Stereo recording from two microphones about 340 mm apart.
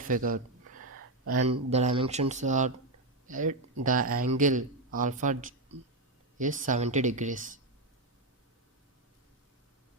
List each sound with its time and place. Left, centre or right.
0.0 s a sound: right
0.8 s gasp: right
1.7 s speech: centre